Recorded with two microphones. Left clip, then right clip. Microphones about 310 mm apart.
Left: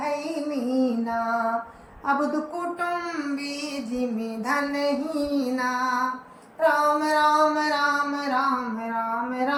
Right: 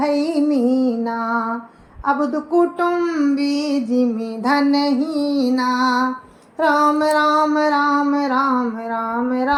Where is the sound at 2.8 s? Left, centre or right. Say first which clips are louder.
Right 9 dB; centre.